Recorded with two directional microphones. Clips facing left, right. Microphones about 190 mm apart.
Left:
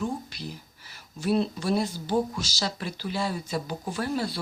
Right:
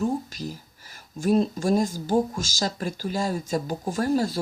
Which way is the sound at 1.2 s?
45° right (ahead or behind).